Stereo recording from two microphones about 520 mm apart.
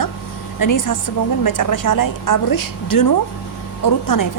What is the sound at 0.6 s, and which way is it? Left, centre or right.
A woman's voice, left.